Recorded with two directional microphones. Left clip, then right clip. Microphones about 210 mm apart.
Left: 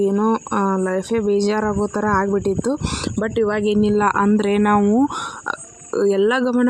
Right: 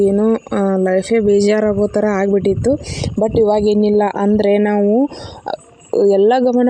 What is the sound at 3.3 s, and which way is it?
Speech, 90° right.